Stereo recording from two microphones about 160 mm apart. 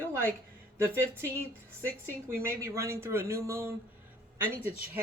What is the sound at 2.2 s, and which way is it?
Speech, 15° right (ahead or behind).